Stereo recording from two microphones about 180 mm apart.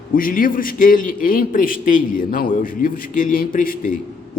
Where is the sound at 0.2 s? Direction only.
50° left (ahead or behind).